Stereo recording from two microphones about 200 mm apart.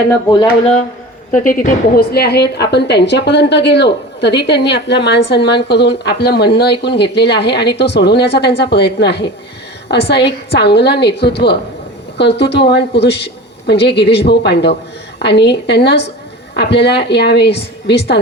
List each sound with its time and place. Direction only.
0.1 s speech: 25° left (ahead or behind)
1.3 s a woman's voice: 40° left (ahead or behind); by 18.2 s 60° left (ahead or behind)